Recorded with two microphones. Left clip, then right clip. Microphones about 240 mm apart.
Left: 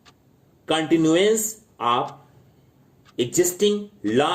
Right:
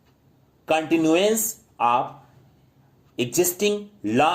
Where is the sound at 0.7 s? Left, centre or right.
Right.